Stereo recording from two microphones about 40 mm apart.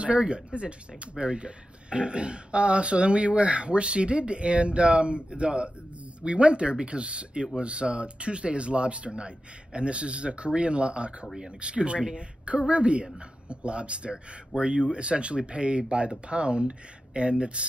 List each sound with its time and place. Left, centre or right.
0.0 s speech: right